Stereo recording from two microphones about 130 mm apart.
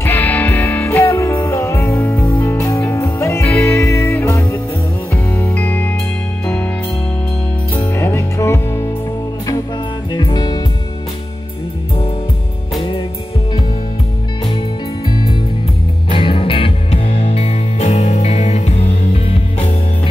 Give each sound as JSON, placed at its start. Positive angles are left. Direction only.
{"t": 0.0, "sound": "music", "side_deg": 15}
{"t": 7.7, "sound": "music", "side_deg": 20}
{"t": 10.1, "sound": "music", "side_deg": 35}
{"t": 15.0, "sound": "music", "side_deg": 30}